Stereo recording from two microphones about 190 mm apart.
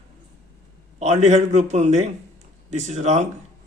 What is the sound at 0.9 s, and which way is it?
A man's voice, 35° right (ahead or behind).